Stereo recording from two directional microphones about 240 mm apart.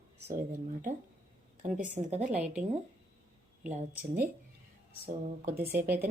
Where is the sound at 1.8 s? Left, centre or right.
Right.